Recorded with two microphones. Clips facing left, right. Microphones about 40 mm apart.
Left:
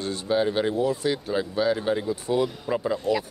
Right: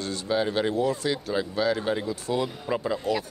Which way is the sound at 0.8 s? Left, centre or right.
Centre.